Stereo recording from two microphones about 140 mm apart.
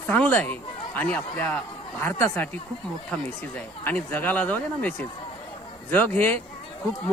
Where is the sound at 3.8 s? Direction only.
10° left (ahead or behind).